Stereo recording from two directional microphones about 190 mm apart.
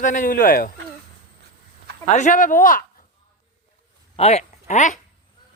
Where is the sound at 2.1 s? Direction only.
40° left (ahead or behind).